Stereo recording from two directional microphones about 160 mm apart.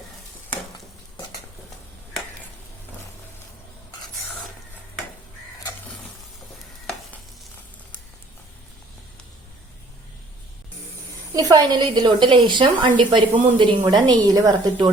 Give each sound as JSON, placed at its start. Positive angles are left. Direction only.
{"t": 11.3, "sound": "a woman's voice", "side_deg": -25}